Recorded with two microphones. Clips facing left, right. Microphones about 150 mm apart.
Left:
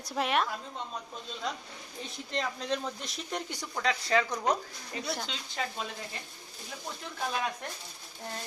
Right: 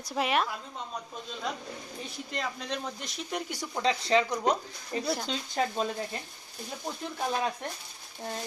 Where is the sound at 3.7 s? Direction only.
20° right (ahead or behind).